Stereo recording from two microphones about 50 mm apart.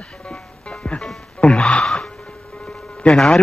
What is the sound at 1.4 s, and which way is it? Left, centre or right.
Music, centre.